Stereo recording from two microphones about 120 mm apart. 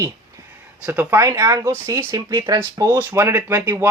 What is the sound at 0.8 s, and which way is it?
Speech, 15° right (ahead or behind).